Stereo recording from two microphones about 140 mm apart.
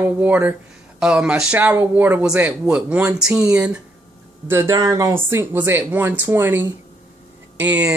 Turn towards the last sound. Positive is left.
turn(degrees=-10)  # may be behind; listen again after turning